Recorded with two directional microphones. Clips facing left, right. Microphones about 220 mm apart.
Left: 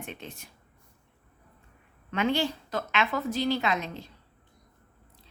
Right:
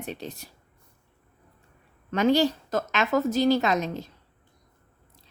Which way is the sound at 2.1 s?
40° right (ahead or behind).